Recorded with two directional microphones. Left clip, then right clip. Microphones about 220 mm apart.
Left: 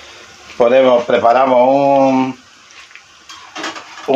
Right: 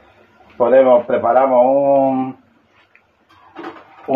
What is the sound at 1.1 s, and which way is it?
Speech, 45° left (ahead or behind).